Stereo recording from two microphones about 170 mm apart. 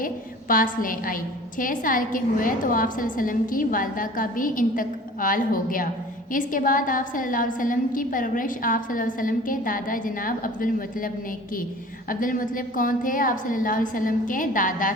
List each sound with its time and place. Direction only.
0.0 s a woman's voice: 55° left (ahead or behind)